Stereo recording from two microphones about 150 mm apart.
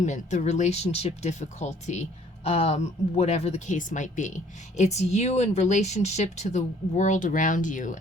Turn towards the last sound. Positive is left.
turn(degrees=60)  # may be behind; listen again after turning